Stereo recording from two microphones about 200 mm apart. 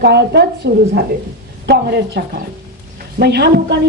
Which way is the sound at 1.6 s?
55° right (ahead or behind).